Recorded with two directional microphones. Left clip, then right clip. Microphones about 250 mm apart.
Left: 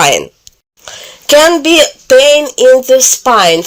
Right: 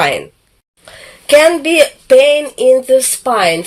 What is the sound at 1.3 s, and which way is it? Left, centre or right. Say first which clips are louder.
Speech: left 2 dB; left.